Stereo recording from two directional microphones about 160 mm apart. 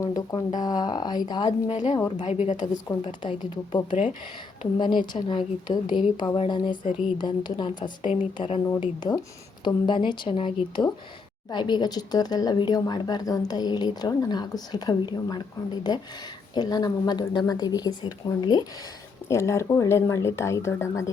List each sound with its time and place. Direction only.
0.2 s speech: 25° left (ahead or behind)
1.5 s a woman's voice: 45° left (ahead or behind)
3.0 s speech: 35° left (ahead or behind)
4.8 s speech: 30° left (ahead or behind)
8.8 s speech: 25° left (ahead or behind)